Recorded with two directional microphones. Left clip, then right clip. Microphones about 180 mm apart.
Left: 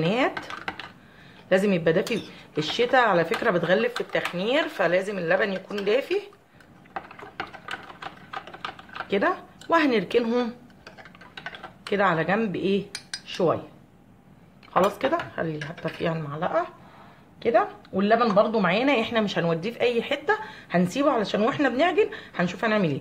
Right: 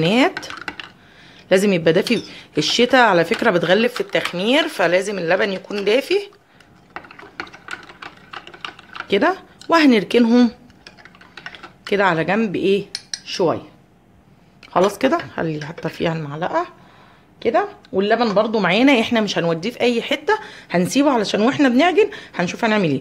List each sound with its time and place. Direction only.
0.0 s speech: 55° right (ahead or behind)
0.5 s computer keyboard: 10° right (ahead or behind)
1.5 s speech: 50° right (ahead or behind)
8.3 s typing: 10° right (ahead or behind)
9.0 s speech: 50° right (ahead or behind)
11.9 s cutlery: 55° right (ahead or behind)
14.7 s speech: 50° right (ahead or behind)